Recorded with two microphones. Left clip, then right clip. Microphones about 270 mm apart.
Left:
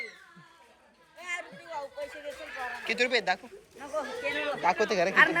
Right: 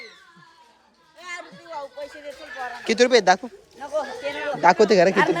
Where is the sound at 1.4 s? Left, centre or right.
Right.